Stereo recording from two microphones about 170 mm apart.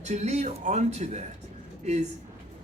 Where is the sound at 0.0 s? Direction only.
40° right (ahead or behind).